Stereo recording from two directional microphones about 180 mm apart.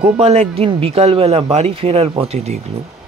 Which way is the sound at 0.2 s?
35° right (ahead or behind).